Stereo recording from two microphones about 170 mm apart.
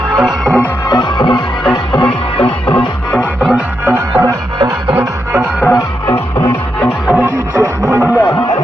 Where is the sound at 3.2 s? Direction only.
5° right (ahead or behind).